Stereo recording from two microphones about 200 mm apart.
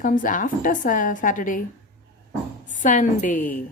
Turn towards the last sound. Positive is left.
turn(degrees=40)  # may be behind; listen again after turning